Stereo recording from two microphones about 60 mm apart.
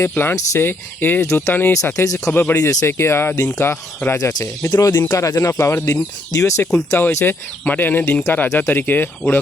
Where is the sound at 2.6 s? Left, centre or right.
Left.